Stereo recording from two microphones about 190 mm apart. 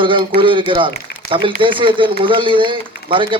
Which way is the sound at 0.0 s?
25° right (ahead or behind).